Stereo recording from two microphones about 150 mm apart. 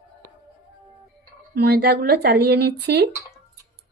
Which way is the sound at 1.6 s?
90° right.